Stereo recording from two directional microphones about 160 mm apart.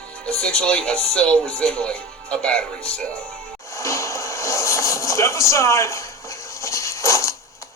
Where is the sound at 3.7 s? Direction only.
20° left (ahead or behind).